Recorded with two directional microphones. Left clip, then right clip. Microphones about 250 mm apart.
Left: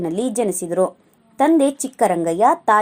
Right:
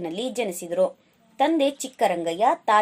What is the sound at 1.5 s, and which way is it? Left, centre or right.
A woman's voice, left.